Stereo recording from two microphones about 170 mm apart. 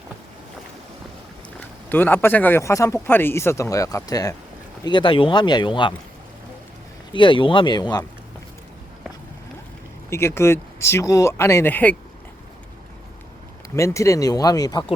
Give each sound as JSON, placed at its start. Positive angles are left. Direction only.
{"t": 1.9, "sound": "speech", "side_deg": 10}
{"t": 7.1, "sound": "speech", "side_deg": 30}
{"t": 10.1, "sound": "speech", "side_deg": 15}
{"t": 13.7, "sound": "speech", "side_deg": 15}